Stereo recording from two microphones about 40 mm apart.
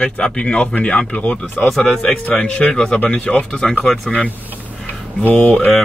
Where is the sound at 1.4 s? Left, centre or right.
Left.